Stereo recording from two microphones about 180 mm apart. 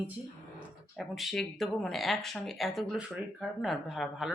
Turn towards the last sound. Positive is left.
turn(degrees=0)  # may be behind; listen again after turning